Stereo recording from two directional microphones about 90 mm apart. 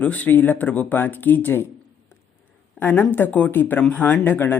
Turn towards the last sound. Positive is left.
turn(degrees=25)  # may be behind; listen again after turning